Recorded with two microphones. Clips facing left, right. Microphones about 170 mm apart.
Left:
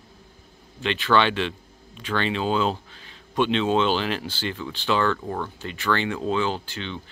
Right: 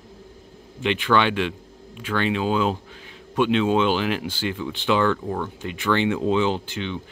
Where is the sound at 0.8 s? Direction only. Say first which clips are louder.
Right 1 dB; 15° right (ahead or behind).